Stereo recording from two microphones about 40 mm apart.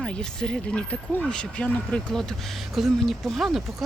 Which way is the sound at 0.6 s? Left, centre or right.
Left.